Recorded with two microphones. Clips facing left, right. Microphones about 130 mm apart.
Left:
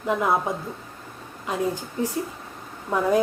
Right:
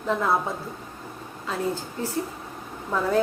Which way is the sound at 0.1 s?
15° left (ahead or behind).